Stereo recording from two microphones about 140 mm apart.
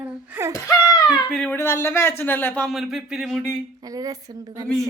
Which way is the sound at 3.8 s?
25° right (ahead or behind).